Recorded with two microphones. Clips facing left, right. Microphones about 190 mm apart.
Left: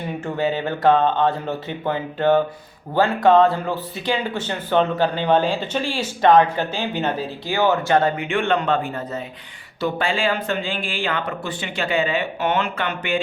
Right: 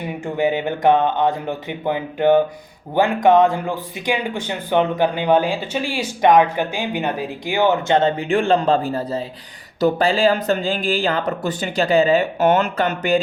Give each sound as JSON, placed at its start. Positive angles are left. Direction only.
{"t": 0.3, "sound": "speech", "side_deg": -15}